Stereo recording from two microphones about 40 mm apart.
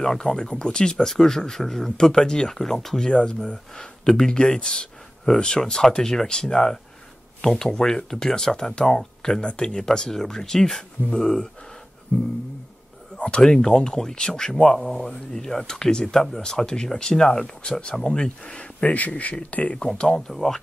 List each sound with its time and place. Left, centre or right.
0.0 s speech: centre
2.5 s speech: centre
3.1 s speech: left
13.1 s speech: left
18.9 s speech: left
20.1 s speech: centre